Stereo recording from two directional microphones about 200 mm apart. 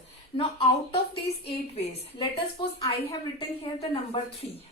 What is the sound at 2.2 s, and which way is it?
A woman's voice, 20° left (ahead or behind).